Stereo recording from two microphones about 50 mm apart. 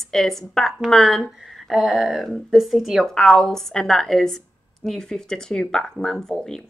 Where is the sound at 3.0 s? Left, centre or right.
Centre.